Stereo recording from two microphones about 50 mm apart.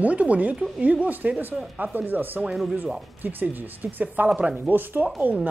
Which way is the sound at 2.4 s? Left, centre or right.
Centre.